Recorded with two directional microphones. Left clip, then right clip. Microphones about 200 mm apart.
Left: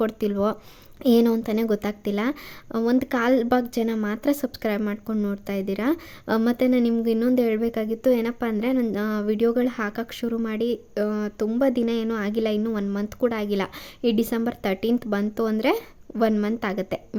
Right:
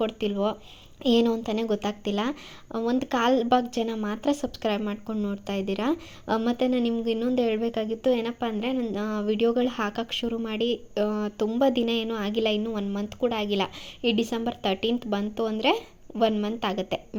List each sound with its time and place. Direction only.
0.0 s a woman's voice: 30° left (ahead or behind)